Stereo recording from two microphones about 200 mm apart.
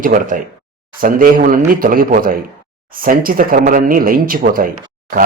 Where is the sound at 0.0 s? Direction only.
45° right (ahead or behind).